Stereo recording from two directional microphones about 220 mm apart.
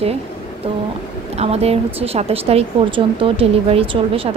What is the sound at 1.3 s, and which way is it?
A woman's voice, 30° right (ahead or behind).